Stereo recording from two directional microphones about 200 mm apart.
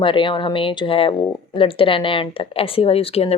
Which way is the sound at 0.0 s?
25° left (ahead or behind).